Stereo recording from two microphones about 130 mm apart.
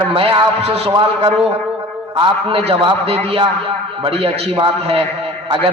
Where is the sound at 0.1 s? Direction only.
45° right (ahead or behind).